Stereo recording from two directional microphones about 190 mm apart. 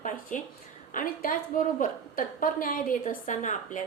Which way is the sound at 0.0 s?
45° left (ahead or behind).